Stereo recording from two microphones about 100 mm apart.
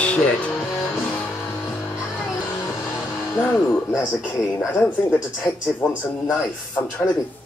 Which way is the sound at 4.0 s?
15° left (ahead or behind).